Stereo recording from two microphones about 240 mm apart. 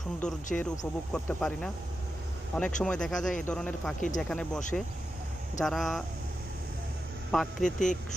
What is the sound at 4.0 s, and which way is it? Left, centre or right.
Speech, left.